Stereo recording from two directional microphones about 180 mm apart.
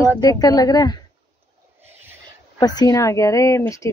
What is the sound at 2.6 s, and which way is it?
Speech, 20° left (ahead or behind).